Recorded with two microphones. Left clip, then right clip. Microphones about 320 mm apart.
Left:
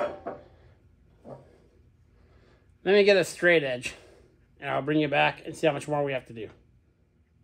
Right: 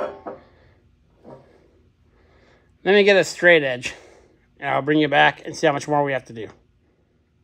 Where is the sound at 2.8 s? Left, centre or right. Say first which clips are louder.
Right 5 dB; right.